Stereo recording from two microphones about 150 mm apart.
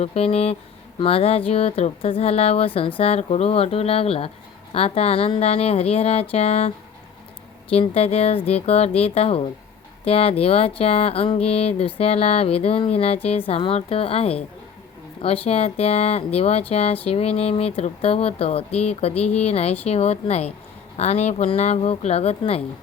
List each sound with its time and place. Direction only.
0.0 s speech: 45° left (ahead or behind)